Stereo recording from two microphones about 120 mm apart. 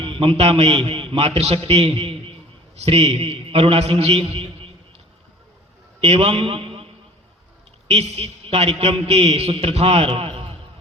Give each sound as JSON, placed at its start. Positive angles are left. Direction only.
{"t": 0.0, "sound": "a man's voice", "side_deg": -50}
{"t": 6.0, "sound": "a man's voice", "side_deg": -55}
{"t": 7.9, "sound": "a man's voice", "side_deg": -60}